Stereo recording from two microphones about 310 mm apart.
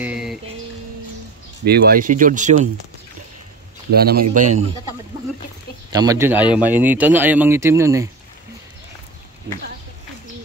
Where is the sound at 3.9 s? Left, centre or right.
Right.